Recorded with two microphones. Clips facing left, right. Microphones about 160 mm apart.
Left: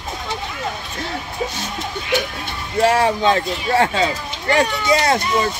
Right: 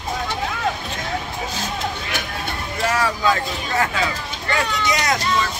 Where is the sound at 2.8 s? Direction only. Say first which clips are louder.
Left 7 dB; 30° left (ahead or behind).